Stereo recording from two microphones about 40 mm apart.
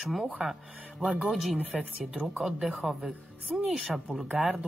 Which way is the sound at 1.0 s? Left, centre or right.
Right.